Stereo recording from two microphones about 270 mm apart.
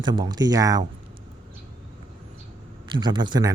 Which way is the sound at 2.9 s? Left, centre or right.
Centre.